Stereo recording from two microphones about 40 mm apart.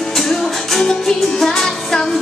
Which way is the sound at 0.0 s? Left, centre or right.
Centre.